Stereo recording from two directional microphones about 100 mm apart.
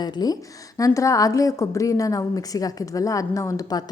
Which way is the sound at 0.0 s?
45° left (ahead or behind).